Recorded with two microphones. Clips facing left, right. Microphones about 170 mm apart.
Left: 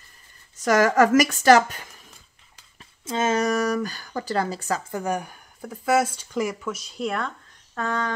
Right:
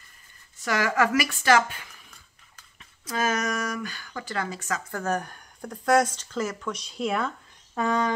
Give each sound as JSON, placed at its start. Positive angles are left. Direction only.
{"t": 0.6, "sound": "a woman's voice", "side_deg": 45}
{"t": 2.5, "sound": "speech", "side_deg": 30}
{"t": 4.9, "sound": "speech", "side_deg": 10}